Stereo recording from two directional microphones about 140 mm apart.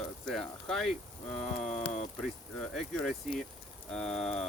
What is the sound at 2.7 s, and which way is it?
Speech, centre (ahead or behind).